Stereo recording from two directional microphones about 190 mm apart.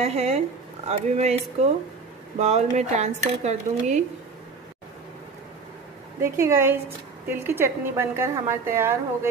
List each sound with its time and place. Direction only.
0.0 s speech: 35° right (ahead or behind)
6.3 s a woman's voice: 15° right (ahead or behind)